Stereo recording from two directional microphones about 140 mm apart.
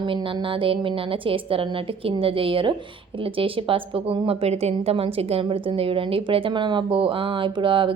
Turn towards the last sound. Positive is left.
turn(degrees=-35)  # may be behind; listen again after turning